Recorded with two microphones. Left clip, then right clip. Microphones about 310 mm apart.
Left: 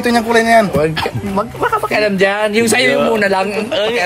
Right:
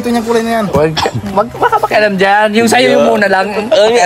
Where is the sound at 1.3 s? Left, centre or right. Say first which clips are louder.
Right 5 dB; right.